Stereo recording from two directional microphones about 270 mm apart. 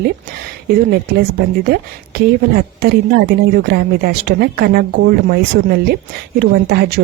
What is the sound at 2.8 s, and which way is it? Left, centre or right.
Speech, right.